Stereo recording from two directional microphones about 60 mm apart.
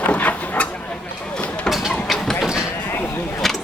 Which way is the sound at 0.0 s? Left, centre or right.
Left.